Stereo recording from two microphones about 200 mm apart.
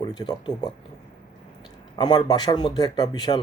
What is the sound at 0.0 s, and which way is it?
Speech, 20° left (ahead or behind).